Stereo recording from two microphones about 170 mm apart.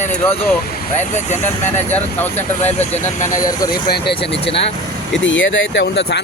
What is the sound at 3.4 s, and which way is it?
Speech, 20° left (ahead or behind).